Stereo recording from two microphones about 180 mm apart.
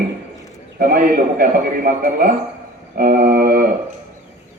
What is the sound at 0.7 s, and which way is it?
A man's voice, 55° right (ahead or behind).